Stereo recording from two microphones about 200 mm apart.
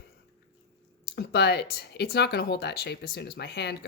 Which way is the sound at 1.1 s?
55° left (ahead or behind).